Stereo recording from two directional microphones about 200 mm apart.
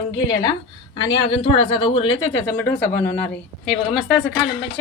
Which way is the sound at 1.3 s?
30° left (ahead or behind).